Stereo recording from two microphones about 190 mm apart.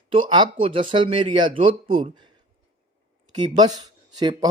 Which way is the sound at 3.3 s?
20° right (ahead or behind).